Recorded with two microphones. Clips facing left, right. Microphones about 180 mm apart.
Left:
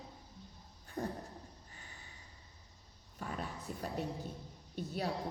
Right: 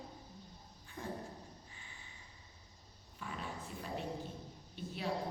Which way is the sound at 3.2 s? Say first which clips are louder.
Left 2 dB; 45° left (ahead or behind).